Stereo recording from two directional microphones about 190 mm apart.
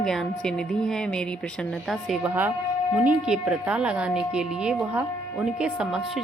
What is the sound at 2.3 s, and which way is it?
Speech, 10° right (ahead or behind).